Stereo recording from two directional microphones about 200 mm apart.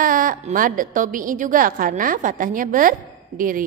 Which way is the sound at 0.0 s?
40° right (ahead or behind).